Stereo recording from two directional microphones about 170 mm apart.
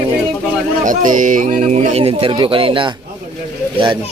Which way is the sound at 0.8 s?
50° right (ahead or behind).